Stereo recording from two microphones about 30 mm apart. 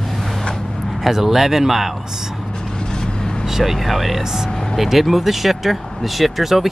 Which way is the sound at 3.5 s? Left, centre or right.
Centre.